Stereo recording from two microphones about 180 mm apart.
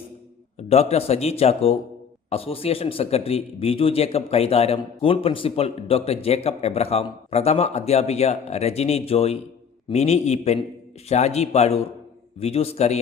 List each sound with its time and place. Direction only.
0.7 s speech: 35° left (ahead or behind)